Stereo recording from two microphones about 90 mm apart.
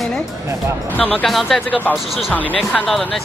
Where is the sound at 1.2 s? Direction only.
5° left (ahead or behind).